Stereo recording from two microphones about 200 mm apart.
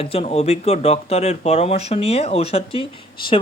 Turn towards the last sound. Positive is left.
turn(degrees=25)  # may be behind; listen again after turning